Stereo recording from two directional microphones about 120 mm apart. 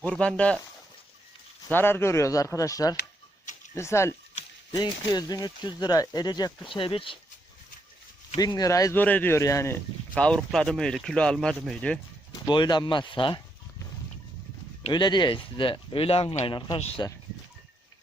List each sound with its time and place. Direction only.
0.0 s speech: 10° left (ahead or behind)
1.7 s speech: 20° left (ahead or behind)
4.7 s speech: 35° left (ahead or behind)
8.4 s speech: 30° left (ahead or behind)
9.0 s speech: 15° left (ahead or behind)
10.2 s speech: 5° left (ahead or behind)
12.3 s speech: 40° left (ahead or behind)
14.8 s speech: 40° left (ahead or behind)
16.4 s speech: 40° left (ahead or behind)